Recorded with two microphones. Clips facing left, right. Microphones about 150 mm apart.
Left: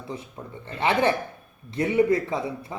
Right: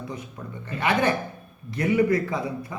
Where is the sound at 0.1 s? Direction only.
25° left (ahead or behind).